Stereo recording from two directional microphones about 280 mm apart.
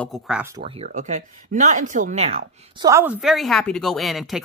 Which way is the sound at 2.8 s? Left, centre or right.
Centre.